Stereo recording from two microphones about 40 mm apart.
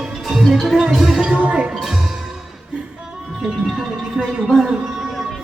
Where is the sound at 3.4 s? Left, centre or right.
Centre.